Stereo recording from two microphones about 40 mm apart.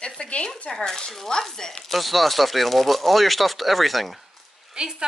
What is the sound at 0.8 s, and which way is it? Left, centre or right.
Speech, centre.